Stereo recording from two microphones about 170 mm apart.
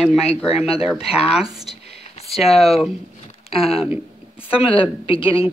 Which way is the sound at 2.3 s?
Centre (ahead or behind).